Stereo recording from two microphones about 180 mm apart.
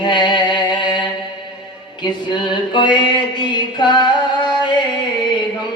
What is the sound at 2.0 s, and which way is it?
Music, 25° left (ahead or behind).